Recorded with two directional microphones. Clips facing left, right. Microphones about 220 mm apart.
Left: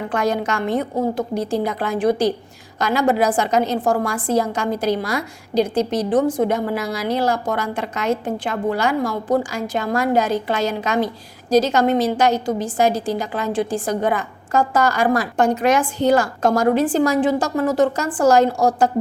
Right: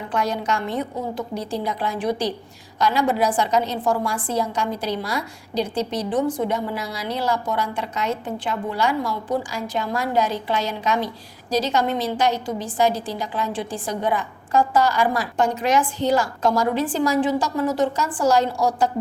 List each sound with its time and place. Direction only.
0.1 s a woman's voice: 50° left (ahead or behind)